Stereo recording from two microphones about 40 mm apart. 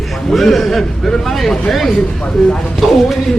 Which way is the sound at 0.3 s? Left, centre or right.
Centre.